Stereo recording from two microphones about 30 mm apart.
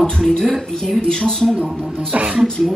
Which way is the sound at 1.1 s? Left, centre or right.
Left.